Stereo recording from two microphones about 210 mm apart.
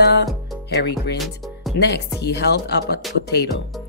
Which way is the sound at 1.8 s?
50° left (ahead or behind).